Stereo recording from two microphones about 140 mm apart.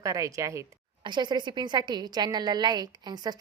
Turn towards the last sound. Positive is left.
turn(degrees=-30)  # may be behind; listen again after turning